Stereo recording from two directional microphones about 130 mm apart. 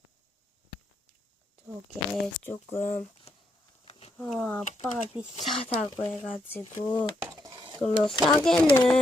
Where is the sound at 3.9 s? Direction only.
50° left (ahead or behind).